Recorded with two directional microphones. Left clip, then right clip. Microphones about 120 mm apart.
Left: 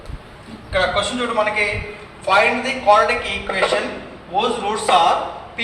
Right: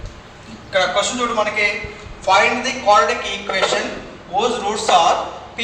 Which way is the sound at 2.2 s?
30° right (ahead or behind).